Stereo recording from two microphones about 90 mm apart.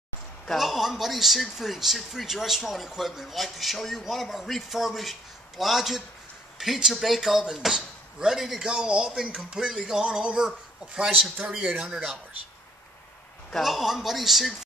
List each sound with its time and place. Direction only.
0.5 s speech: centre (ahead or behind)
13.6 s speech: centre (ahead or behind)